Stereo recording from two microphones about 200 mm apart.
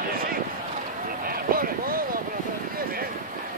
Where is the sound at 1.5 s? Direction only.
45° right (ahead or behind).